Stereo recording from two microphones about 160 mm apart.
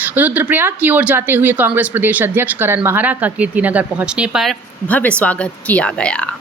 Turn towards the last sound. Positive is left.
turn(degrees=5)  # may be behind; listen again after turning